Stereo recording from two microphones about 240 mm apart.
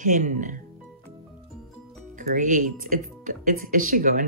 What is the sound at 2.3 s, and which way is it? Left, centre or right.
Speech, right.